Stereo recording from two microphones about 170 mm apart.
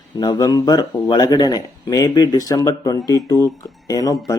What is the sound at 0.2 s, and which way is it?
Speech, 25° left (ahead or behind).